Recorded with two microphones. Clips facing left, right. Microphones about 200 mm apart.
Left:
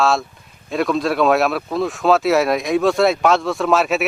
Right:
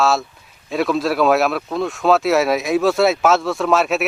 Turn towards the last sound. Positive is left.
turn(degrees=0)  # may be behind; listen again after turning